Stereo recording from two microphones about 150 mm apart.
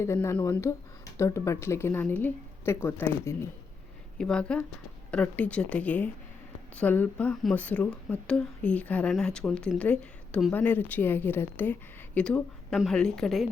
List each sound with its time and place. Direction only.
0.0 s speech: 20° left (ahead or behind)
4.2 s speech: 5° left (ahead or behind)